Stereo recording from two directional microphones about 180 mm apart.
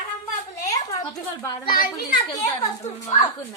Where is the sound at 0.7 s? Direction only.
20° left (ahead or behind).